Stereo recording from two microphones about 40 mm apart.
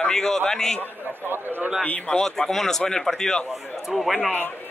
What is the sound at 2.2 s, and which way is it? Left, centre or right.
Speech, centre.